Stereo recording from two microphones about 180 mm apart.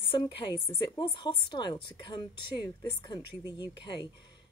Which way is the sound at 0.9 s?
25° left (ahead or behind).